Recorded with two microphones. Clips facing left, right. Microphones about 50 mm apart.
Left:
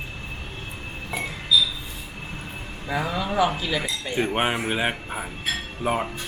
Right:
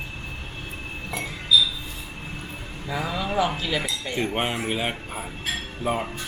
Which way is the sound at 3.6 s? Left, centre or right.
Centre.